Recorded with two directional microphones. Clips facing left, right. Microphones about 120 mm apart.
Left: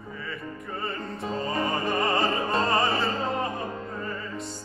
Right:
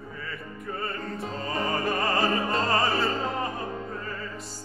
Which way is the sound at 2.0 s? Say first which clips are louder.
Even; centre (ahead or behind).